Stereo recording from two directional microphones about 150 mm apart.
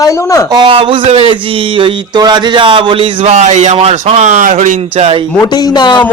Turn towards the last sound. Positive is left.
turn(degrees=30)  # may be behind; listen again after turning